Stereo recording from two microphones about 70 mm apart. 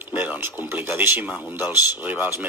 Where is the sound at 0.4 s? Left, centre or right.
Right.